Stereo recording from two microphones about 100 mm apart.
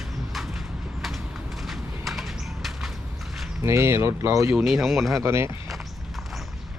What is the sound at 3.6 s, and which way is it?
Speech, 30° right (ahead or behind).